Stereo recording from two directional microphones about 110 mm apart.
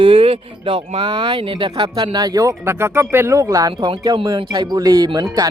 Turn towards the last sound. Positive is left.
turn(degrees=-40)  # may be behind; listen again after turning